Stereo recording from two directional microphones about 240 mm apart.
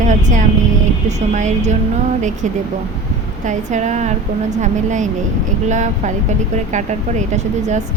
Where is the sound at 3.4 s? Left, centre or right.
Right.